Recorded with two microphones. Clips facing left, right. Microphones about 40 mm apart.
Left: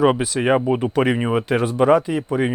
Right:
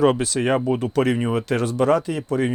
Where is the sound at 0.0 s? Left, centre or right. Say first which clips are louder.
Left 1 dB; centre.